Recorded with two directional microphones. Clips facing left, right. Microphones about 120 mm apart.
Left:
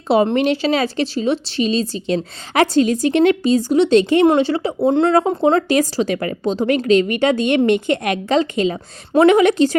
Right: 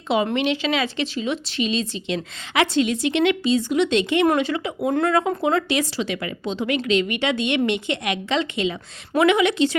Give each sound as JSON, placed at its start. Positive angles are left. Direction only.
{"t": 0.3, "sound": "speech", "side_deg": 40}